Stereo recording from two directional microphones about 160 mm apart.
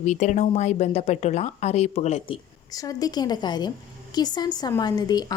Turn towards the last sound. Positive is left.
turn(degrees=25)  # may be behind; listen again after turning